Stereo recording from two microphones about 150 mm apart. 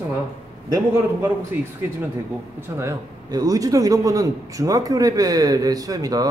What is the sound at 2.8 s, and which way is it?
A man's voice, 25° right (ahead or behind).